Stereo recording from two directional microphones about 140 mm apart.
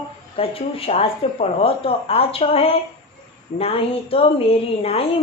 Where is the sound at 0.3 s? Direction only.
45° left (ahead or behind).